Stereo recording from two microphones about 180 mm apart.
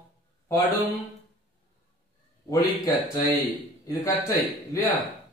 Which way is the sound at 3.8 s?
20° left (ahead or behind).